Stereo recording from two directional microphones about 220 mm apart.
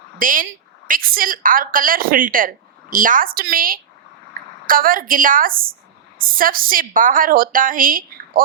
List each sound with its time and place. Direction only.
0.2 s a woman's voice: 40° right (ahead or behind)